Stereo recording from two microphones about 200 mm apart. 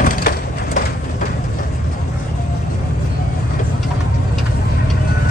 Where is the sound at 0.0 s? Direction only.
45° left (ahead or behind).